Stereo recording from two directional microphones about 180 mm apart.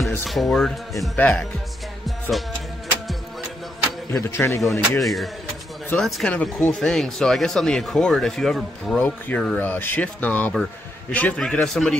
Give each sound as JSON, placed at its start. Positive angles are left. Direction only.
{"t": 0.0, "sound": "speech", "side_deg": 0}
{"t": 2.0, "sound": "music", "side_deg": 0}
{"t": 4.1, "sound": "speech", "side_deg": 15}
{"t": 4.7, "sound": "speech", "side_deg": 0}